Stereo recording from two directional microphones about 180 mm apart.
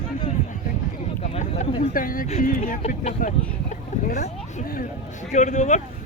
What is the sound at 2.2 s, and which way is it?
Speech, 45° left (ahead or behind).